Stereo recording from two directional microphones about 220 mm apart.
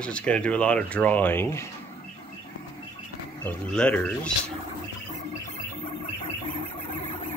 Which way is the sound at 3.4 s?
5° left (ahead or behind).